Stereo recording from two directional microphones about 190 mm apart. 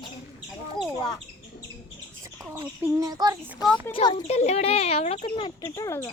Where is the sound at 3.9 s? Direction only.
25° left (ahead or behind).